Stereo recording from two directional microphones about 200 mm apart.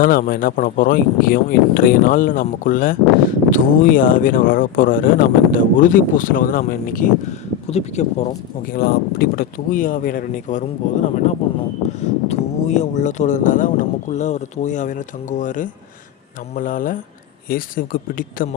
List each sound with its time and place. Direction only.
0.0 s speech: 45° left (ahead or behind)
11.9 s speech: 35° left (ahead or behind)